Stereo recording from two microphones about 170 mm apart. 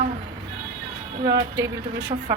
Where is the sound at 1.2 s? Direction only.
20° right (ahead or behind).